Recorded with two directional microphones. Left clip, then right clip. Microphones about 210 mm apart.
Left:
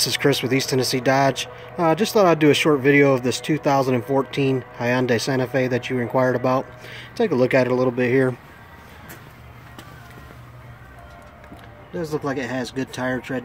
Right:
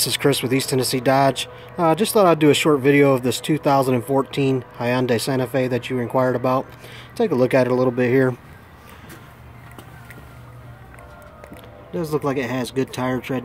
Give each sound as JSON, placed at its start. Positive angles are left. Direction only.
{"t": 0.0, "sound": "speech", "side_deg": 0}
{"t": 11.9, "sound": "speech", "side_deg": -15}